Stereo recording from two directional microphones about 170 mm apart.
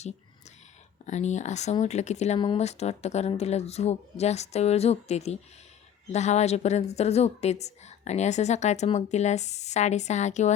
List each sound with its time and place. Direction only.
1.0 s a woman's voice: 45° left (ahead or behind)